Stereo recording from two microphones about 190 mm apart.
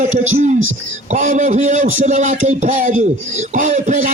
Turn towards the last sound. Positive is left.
turn(degrees=-40)  # may be behind; listen again after turning